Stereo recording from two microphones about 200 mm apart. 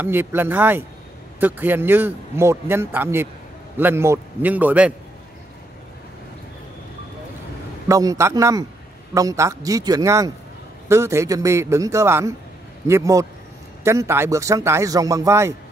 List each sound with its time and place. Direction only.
0.0 s a man's voice: 10° right (ahead or behind)
7.9 s a man's voice: 15° right (ahead or behind)